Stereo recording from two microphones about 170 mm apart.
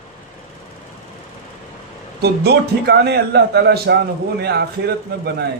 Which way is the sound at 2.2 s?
70° right (ahead or behind).